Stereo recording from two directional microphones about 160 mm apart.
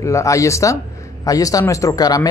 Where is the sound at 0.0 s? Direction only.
20° left (ahead or behind).